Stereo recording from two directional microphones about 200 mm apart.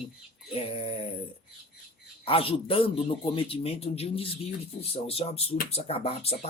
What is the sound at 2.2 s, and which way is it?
Speech, 25° left (ahead or behind).